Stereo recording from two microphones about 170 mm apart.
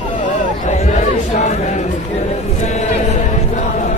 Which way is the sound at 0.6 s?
45° left (ahead or behind).